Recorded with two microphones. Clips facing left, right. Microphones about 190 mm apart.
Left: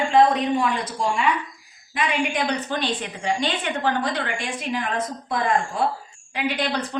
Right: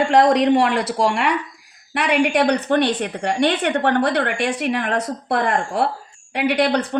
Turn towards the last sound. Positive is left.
turn(degrees=-65)  # may be behind; listen again after turning